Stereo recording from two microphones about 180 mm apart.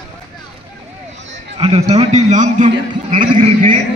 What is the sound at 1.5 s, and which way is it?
A man's voice, 30° right (ahead or behind).